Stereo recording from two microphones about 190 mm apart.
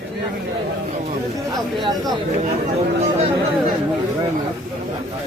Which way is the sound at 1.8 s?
20° right (ahead or behind).